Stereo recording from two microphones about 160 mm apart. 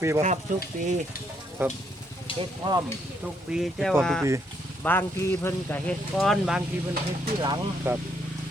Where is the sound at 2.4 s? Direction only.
25° right (ahead or behind).